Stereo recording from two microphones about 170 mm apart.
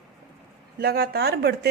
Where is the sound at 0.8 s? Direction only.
65° right (ahead or behind).